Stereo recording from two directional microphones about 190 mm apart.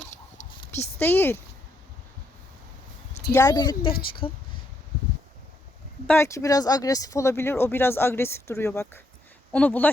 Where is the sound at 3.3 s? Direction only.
20° left (ahead or behind).